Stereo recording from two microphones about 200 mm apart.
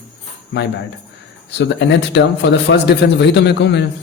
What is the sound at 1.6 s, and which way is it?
Speech, 60° left (ahead or behind).